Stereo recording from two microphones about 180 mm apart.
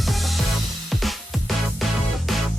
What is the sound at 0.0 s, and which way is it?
Music, centre (ahead or behind).